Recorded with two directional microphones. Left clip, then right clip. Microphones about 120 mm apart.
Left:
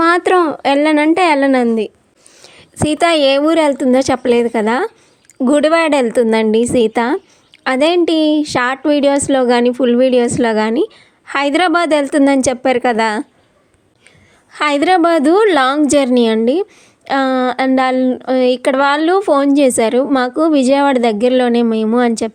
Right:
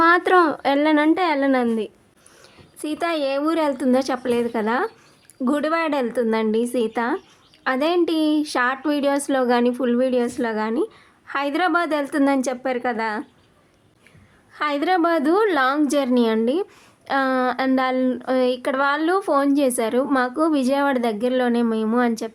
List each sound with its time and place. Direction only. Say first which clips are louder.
0.0 s a woman's voice: left 4 dB; 40° left (ahead or behind)
1.6 s speech: left 8 dB; 40° left (ahead or behind)
2.4 s a woman's voice: left 13 dB; 70° left (ahead or behind)
3.4 s a woman's voice: left 9 dB; 50° left (ahead or behind); by 13.2 s 65° left (ahead or behind)
14.5 s a woman's voice: left 8 dB; 55° left (ahead or behind)